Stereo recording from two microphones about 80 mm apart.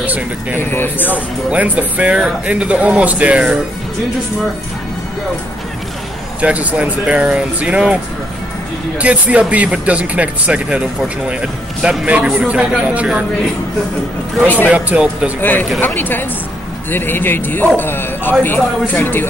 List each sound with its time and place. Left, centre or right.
0.0 s speech: centre
0.6 s speech: left
1.1 s speech: centre
6.4 s speech: centre
9.0 s speech: centre
14.4 s speech: left
14.7 s speech: centre
15.8 s speech: left